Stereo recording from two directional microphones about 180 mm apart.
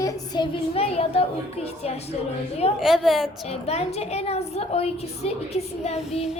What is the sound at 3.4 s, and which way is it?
A woman's voice, 35° left (ahead or behind).